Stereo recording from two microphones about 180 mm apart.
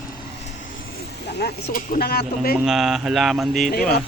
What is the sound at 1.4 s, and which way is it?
Speech, 55° left (ahead or behind).